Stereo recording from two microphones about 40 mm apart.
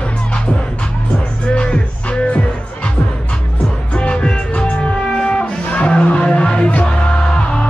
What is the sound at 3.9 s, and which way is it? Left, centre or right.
Music, left.